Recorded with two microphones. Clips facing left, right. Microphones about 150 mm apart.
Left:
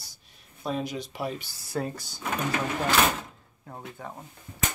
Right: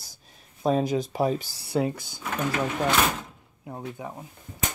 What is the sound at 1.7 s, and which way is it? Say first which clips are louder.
Speech: right 6 dB; 15° right (ahead or behind).